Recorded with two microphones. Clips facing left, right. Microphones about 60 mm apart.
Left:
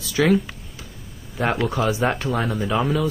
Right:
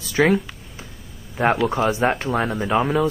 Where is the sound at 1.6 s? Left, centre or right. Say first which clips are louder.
Right 2 dB; right.